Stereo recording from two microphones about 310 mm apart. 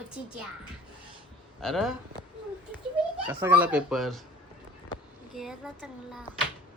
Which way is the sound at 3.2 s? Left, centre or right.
Centre.